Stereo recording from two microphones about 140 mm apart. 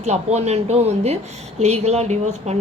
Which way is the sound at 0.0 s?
50° right (ahead or behind).